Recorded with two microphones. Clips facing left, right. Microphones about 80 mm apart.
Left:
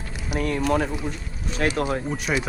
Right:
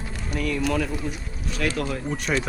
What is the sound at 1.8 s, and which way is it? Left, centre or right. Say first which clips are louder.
Speech: left 3 dB; left.